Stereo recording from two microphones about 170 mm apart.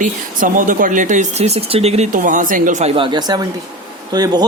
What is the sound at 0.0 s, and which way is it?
Speech, 50° right (ahead or behind).